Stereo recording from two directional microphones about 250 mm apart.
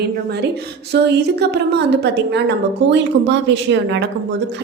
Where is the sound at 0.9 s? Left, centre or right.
Right.